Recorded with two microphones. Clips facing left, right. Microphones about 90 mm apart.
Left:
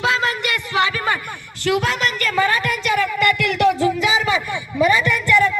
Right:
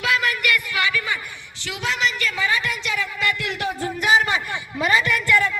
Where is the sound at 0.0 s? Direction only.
30° left (ahead or behind); by 3.9 s 85° left.